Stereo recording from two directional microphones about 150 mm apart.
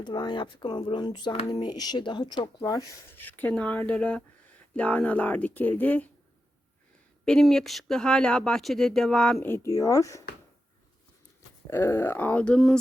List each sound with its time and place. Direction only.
0.0 s speech: 30° left (ahead or behind)
3.2 s speech: 10° left (ahead or behind)
7.3 s speech: centre (ahead or behind); by 10.2 s 20° left (ahead or behind)
11.7 s speech: 20° left (ahead or behind); by 12.8 s centre (ahead or behind)